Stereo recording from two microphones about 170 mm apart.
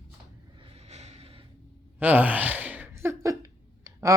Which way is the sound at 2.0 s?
10° right (ahead or behind).